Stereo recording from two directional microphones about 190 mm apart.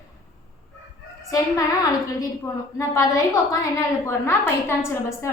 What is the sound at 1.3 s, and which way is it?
A woman's voice, 20° left (ahead or behind).